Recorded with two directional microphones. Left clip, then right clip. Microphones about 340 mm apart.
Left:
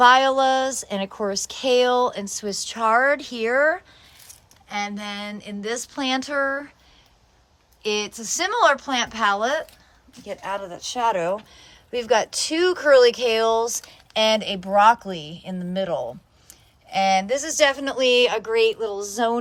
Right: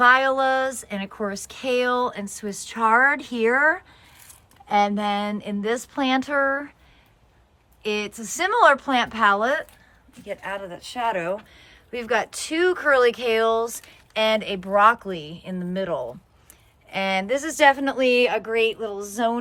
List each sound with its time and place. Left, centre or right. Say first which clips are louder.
0.0 s a woman's voice: left 2 dB; centre
7.8 s a woman's voice: left 2 dB; centre